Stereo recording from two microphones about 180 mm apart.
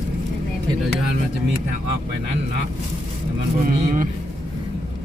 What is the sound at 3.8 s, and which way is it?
Speech, 45° right (ahead or behind).